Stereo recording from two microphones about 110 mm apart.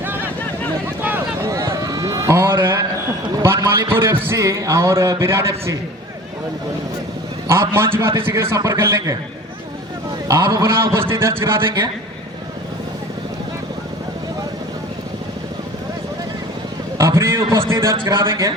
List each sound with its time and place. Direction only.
0.0 s vehicle: 20° right (ahead or behind)
1.5 s run: 30° right (ahead or behind)
3.4 s a man's voice: 25° right (ahead or behind)
7.4 s a man's voice: 25° right (ahead or behind)
10.2 s a man's voice: 30° right (ahead or behind)
11.6 s a man's voice: 40° right (ahead or behind)
17.0 s a sound: 25° right (ahead or behind)
17.7 s a man's voice: 25° right (ahead or behind)